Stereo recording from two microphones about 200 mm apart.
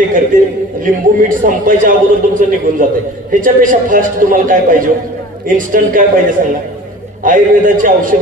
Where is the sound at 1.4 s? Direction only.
40° right (ahead or behind).